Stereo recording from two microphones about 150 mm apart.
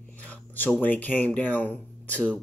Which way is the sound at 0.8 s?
10° left (ahead or behind).